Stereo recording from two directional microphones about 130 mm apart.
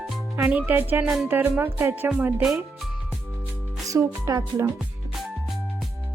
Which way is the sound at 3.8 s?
25° right (ahead or behind).